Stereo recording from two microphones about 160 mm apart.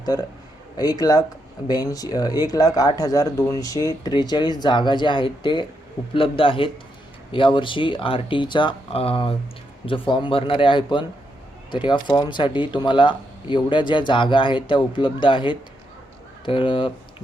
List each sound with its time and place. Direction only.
0.0 s speech: 25° left (ahead or behind)